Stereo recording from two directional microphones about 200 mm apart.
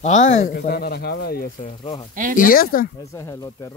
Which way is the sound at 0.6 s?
50° left (ahead or behind).